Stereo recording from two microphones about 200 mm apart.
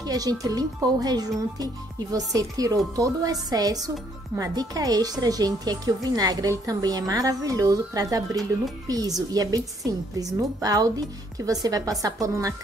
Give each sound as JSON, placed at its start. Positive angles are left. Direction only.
{"t": 0.0, "sound": "a woman's voice", "side_deg": -20}